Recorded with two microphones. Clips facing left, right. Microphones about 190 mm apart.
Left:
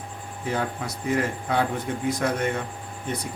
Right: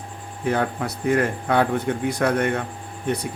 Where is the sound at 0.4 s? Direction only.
60° right (ahead or behind).